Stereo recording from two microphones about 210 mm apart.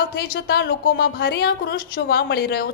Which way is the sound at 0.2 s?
50° left (ahead or behind).